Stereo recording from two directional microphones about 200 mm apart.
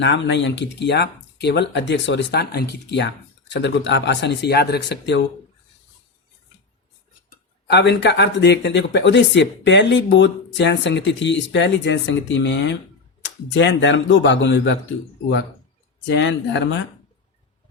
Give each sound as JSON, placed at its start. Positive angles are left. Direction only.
{"t": 0.0, "sound": "speech", "side_deg": 65}
{"t": 7.3, "sound": "a man's voice", "side_deg": 55}
{"t": 16.0, "sound": "speech", "side_deg": 60}